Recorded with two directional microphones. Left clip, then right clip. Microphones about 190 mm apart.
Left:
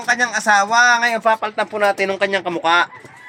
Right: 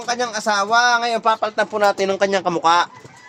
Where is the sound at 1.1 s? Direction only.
20° right (ahead or behind).